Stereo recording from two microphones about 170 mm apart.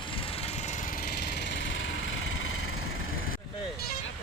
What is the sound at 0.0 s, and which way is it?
Engine, 30° left (ahead or behind).